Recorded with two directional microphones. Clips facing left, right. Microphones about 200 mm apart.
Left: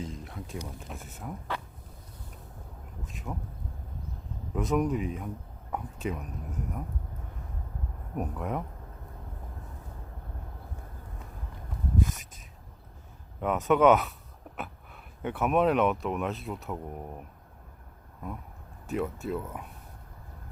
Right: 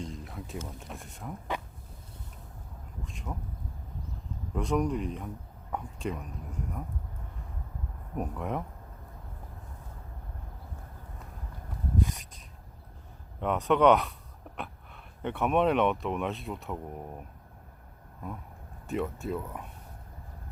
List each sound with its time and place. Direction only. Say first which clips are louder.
0.0 s a sound: left 1 dB; centre (ahead or behind)
0.8 s speech: left 1 dB; centre (ahead or behind)
3.0 s speech: left 1 dB; centre (ahead or behind)
4.5 s speech: left 1 dB; centre (ahead or behind)
8.1 s speech: even; centre (ahead or behind)
11.9 s a sound: left 1 dB; centre (ahead or behind)
13.4 s speech: left 1 dB; centre (ahead or behind)
15.2 s speech: left 1 dB; centre (ahead or behind)
18.9 s speech: left 1 dB; centre (ahead or behind)